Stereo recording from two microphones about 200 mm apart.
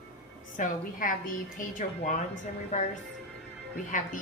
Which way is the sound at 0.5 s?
40° left (ahead or behind).